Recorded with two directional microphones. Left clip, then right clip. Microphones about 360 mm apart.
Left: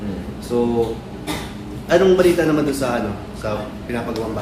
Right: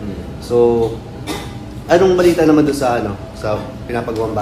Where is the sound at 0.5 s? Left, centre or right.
Centre.